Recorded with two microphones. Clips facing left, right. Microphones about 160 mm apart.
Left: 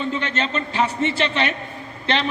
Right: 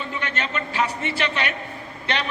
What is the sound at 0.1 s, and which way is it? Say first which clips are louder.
A man's voice: left 4 dB; 25° left (ahead or behind).